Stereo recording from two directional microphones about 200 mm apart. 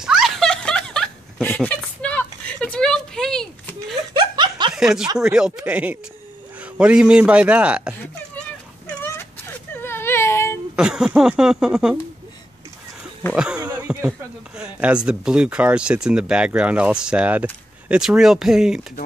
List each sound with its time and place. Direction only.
0.0 s a sound: centre (ahead or behind)
4.1 s snicker: 20° right (ahead or behind)
4.7 s speech: centre (ahead or behind)
9.8 s whimper: 10° left (ahead or behind)
10.8 s speech: 5° right (ahead or behind)
13.3 s a sound: 5° right (ahead or behind)
14.6 s speech: 5° right (ahead or behind)